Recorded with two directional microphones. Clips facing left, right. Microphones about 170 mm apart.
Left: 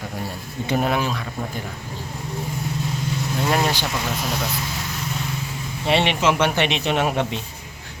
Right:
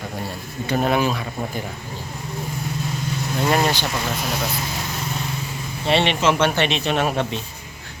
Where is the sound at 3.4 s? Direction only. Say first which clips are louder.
Right 2 dB; 5° left (ahead or behind).